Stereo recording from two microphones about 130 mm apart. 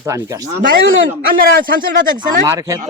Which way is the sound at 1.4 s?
90° right.